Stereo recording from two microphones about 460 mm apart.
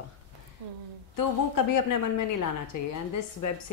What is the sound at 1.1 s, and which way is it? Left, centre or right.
Speech, left.